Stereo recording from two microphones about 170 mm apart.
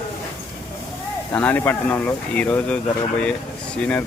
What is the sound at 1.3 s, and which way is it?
Speech, 10° left (ahead or behind).